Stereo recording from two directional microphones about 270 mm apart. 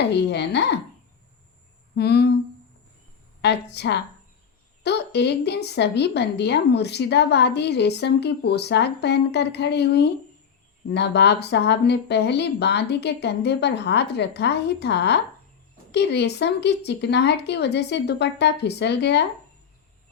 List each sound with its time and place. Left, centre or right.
0.0 s a woman's voice: left
2.0 s a woman's voice: left
3.4 s a woman's voice: left